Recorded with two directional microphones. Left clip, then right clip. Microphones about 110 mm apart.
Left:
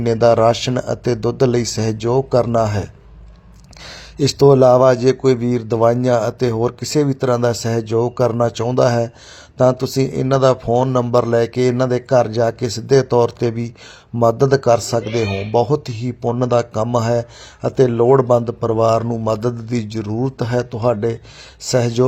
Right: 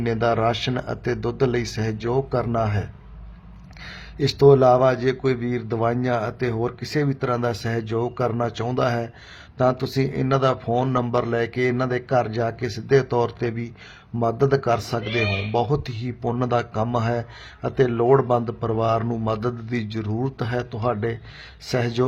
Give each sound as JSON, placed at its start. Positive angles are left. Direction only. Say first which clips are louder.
{"t": 0.0, "sound": "a man's voice", "louder": "left 9 dB", "side_deg": 35}